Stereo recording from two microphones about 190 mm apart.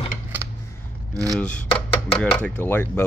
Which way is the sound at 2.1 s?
5° left (ahead or behind).